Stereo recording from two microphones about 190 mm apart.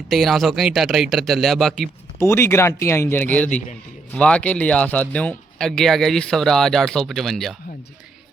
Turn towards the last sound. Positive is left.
turn(degrees=0)  # may be behind; listen again after turning